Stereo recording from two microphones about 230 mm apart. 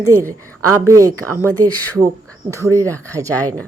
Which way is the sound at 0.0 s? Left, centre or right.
Centre.